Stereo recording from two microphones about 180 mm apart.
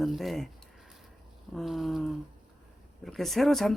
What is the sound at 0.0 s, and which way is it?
Speech, centre (ahead or behind).